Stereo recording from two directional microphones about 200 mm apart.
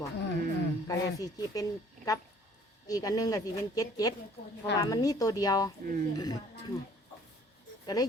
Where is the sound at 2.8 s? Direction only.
15° left (ahead or behind).